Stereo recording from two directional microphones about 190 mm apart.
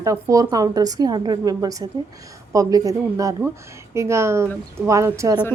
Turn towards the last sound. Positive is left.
turn(degrees=-15)  # may be behind; listen again after turning